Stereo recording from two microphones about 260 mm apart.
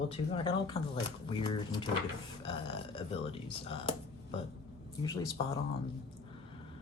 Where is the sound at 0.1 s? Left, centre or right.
Centre.